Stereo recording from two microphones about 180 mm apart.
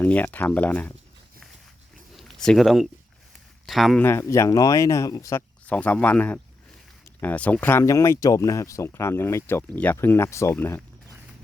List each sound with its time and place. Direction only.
0.0 s speech: 10° left (ahead or behind)
2.1 s a sound: centre (ahead or behind)
3.7 s speech: centre (ahead or behind)
4.0 s speech: 15° left (ahead or behind)
5.6 s speech: 10° left (ahead or behind)